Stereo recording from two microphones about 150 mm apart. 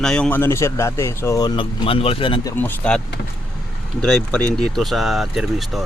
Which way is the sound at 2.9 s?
5° left (ahead or behind).